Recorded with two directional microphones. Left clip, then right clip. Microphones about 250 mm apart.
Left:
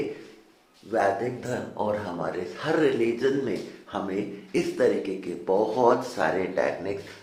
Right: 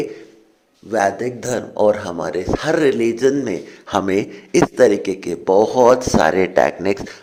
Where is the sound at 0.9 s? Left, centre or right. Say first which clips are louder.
Right 6 dB; right.